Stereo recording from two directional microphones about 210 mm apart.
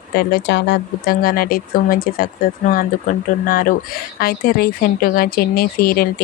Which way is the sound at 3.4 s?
40° left (ahead or behind).